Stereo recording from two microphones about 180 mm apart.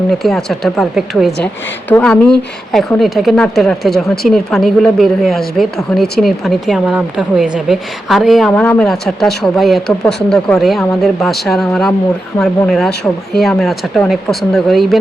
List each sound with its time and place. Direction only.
0.1 s speech: centre (ahead or behind)